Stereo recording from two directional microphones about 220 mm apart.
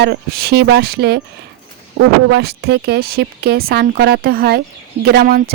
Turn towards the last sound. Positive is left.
turn(degrees=-40)  # may be behind; listen again after turning